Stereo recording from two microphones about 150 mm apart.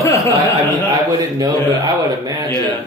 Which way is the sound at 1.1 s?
25° right (ahead or behind).